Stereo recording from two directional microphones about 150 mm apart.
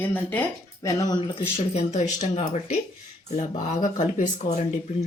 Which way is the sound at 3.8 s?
55° left (ahead or behind).